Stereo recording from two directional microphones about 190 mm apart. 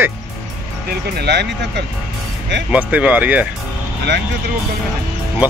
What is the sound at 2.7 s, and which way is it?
Speech, 5° right (ahead or behind).